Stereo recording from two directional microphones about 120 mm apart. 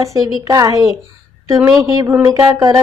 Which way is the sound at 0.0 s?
25° right (ahead or behind).